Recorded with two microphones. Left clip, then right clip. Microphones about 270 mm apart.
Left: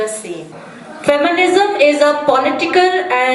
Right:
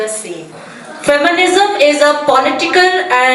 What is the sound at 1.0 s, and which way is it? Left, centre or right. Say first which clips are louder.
A woman's voice: right 2 dB; centre.